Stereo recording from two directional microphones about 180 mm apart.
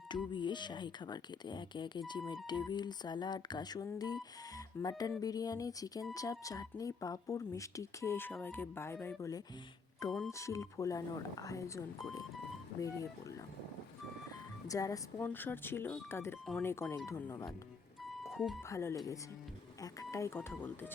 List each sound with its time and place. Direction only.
0.1 s speech: 25° left (ahead or behind)
18.2 s music: centre (ahead or behind)
18.7 s speech: 15° left (ahead or behind)